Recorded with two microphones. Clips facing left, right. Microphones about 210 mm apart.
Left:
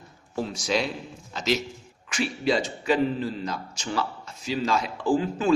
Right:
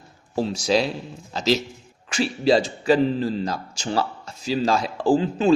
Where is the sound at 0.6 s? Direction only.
35° right (ahead or behind).